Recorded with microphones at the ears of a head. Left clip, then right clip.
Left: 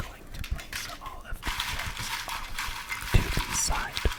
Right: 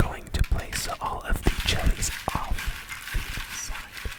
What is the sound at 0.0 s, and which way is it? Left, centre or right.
Whispering, right.